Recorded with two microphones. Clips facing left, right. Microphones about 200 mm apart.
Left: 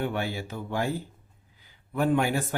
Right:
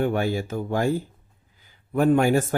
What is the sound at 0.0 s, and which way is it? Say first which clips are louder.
Speech: right 7 dB; 45° right (ahead or behind).